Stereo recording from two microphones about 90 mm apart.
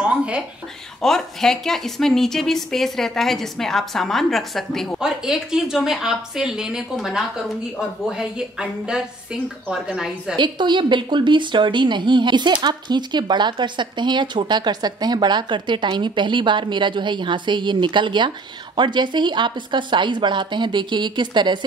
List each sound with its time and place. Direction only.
0.0 s a sound: 10° right (ahead or behind)
1.0 s a woman's voice: 5° left (ahead or behind)
10.3 s a woman's voice: 60° right (ahead or behind)